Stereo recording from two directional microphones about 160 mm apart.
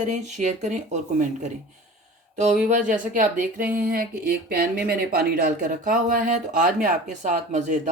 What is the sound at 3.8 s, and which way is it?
Speech, 70° right (ahead or behind).